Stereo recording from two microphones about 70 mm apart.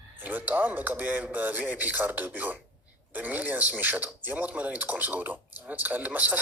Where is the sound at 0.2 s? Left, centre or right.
Right.